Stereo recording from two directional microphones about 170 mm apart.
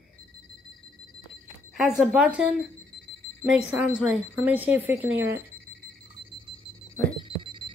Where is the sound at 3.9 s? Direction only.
10° right (ahead or behind).